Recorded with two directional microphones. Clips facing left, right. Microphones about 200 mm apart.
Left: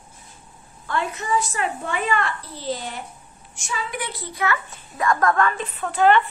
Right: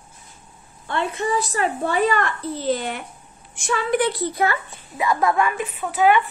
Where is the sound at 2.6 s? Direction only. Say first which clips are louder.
Right 4 dB; 60° right (ahead or behind).